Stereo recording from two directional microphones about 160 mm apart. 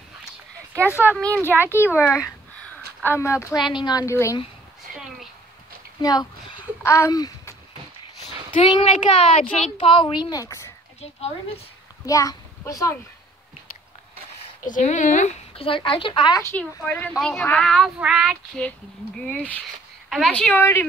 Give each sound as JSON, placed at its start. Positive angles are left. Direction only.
{"t": 0.8, "sound": "speech", "side_deg": -10}
{"t": 1.2, "sound": "a woman's voice", "side_deg": 10}
{"t": 2.2, "sound": "a sound", "side_deg": 10}
{"t": 3.0, "sound": "a woman's voice", "side_deg": 15}
{"t": 6.8, "sound": "speech", "side_deg": 20}
{"t": 8.9, "sound": "speech", "side_deg": 50}
{"t": 11.0, "sound": "speech", "side_deg": 40}
{"t": 12.1, "sound": "a child's voice", "side_deg": 20}
{"t": 14.6, "sound": "speech", "side_deg": 50}
{"t": 15.5, "sound": "speech", "side_deg": 35}
{"t": 16.4, "sound": "a woman's voice", "side_deg": 10}